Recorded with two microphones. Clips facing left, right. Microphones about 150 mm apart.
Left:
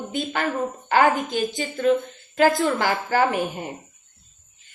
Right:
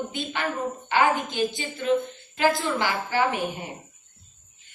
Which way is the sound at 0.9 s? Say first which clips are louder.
Left 4 dB; 45° left (ahead or behind).